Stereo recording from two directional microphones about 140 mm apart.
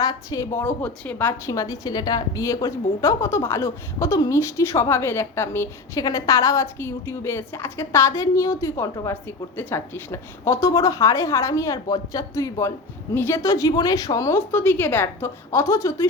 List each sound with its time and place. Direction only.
0.0 s a woman's voice: 25° left (ahead or behind)
1.3 s a woman's voice: 25° left (ahead or behind)